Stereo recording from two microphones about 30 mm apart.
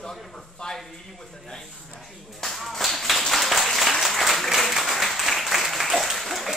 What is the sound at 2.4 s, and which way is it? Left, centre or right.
Clapping, centre.